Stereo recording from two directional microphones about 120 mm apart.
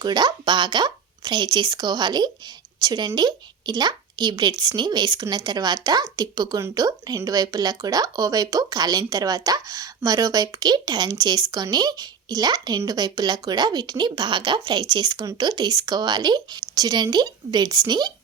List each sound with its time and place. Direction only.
0.0 s speech: 35° right (ahead or behind)